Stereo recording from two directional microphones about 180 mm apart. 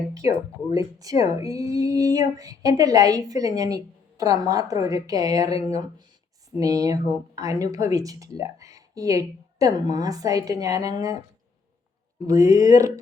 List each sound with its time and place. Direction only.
0.2 s speech: 35° left (ahead or behind)
0.7 s speech: 20° right (ahead or behind)
12.3 s speech: 20° right (ahead or behind)